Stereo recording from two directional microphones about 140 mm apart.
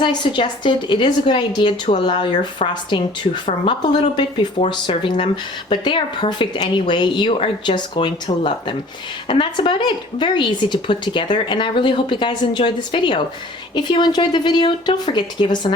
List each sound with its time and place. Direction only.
0.0 s speech: 35° left (ahead or behind)
4.2 s speech: 35° left (ahead or behind)